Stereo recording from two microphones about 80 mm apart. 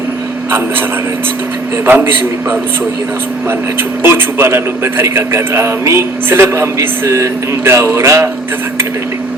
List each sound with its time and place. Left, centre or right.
1.9 s a man's voice: right
4.0 s a man's voice: right